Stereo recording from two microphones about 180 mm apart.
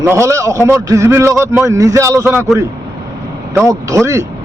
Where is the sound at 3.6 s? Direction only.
15° right (ahead or behind).